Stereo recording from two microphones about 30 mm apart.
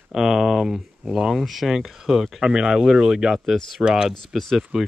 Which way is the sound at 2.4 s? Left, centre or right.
Right.